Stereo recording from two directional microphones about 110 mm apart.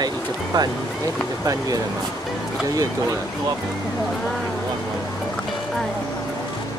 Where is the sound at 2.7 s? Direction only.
30° right (ahead or behind).